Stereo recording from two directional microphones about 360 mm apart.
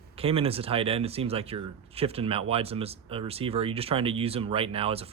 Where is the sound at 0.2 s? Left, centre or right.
Centre.